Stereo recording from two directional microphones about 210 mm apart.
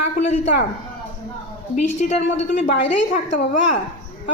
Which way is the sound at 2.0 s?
35° left (ahead or behind).